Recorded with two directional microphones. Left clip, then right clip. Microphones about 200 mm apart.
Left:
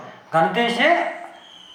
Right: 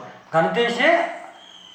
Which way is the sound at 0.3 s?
15° left (ahead or behind).